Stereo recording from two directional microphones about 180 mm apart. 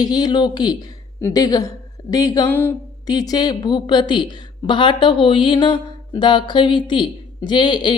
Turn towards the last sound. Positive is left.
turn(degrees=25)  # may be behind; listen again after turning